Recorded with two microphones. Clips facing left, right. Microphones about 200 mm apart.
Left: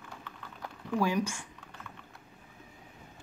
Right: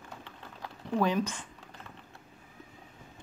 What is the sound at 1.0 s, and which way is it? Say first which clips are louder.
Speech: right 1 dB; 10° left (ahead or behind).